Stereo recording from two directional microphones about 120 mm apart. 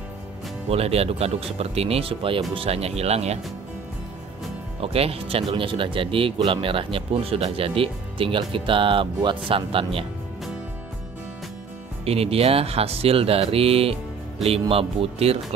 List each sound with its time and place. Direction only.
0.7 s speech: 55° right (ahead or behind)
4.8 s speech: 55° right (ahead or behind)
12.0 s speech: 55° right (ahead or behind)